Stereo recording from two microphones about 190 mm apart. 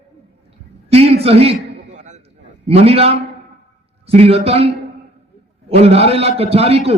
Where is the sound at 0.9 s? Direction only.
35° right (ahead or behind).